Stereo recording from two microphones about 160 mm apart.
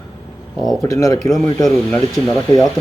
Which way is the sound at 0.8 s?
20° left (ahead or behind).